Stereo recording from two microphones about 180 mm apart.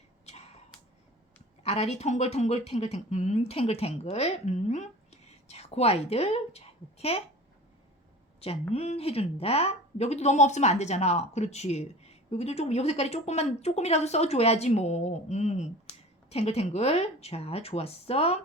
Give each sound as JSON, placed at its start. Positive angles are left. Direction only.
{"t": 0.3, "sound": "a sound", "side_deg": 35}
{"t": 1.6, "sound": "a woman's voice", "side_deg": 35}
{"t": 8.4, "sound": "speech", "side_deg": 35}